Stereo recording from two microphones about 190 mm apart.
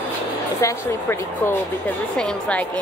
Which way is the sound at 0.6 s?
10° left (ahead or behind).